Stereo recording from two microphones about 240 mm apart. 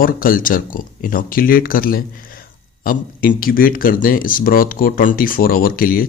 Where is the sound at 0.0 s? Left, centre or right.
Left.